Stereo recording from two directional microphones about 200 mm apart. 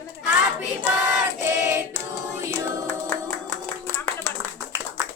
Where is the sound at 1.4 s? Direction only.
15° right (ahead or behind).